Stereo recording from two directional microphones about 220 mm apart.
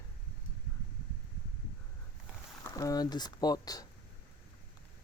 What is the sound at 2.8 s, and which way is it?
Speech, 15° left (ahead or behind).